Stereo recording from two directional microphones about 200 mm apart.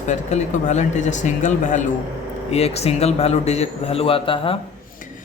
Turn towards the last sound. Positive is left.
turn(degrees=25)  # may be behind; listen again after turning